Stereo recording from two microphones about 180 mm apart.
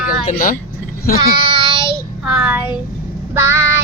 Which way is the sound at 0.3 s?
45° left (ahead or behind).